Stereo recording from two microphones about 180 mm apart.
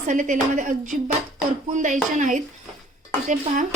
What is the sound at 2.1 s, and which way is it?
Speech, 45° right (ahead or behind).